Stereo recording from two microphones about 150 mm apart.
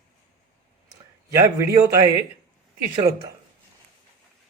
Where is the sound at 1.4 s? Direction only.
20° right (ahead or behind).